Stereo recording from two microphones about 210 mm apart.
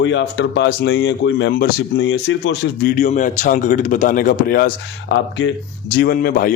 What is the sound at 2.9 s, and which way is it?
Speech, 35° left (ahead or behind).